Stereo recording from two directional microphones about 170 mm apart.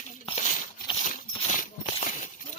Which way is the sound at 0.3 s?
45° left (ahead or behind).